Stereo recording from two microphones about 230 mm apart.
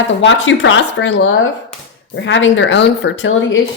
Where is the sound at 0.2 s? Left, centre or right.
Left.